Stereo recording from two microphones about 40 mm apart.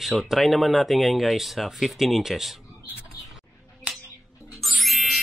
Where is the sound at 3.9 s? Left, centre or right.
Right.